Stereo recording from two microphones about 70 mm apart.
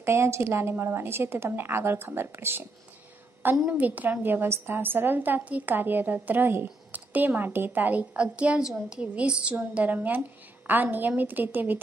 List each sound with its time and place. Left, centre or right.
0.0 s a woman's voice: right
3.6 s a woman's voice: right